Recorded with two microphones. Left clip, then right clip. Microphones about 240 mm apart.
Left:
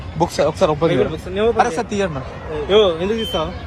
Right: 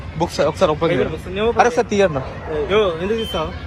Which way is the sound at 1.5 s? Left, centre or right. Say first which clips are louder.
Right 3 dB; centre.